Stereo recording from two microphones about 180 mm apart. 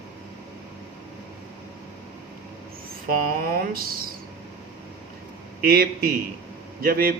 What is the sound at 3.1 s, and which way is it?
Speech, 55° right (ahead or behind).